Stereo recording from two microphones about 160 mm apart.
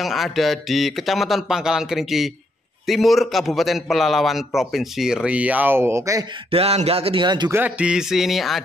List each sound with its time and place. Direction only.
0.0 s speech: centre (ahead or behind); by 6.2 s 20° right (ahead or behind)
6.5 s speech: 40° right (ahead or behind)
7.5 s speech: 10° right (ahead or behind)